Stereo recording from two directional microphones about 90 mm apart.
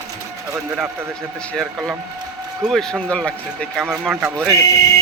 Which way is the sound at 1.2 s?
10° left (ahead or behind).